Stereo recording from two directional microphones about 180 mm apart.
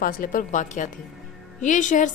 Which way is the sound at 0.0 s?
50° left (ahead or behind).